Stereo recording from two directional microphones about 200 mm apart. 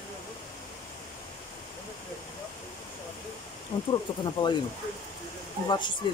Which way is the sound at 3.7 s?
25° left (ahead or behind).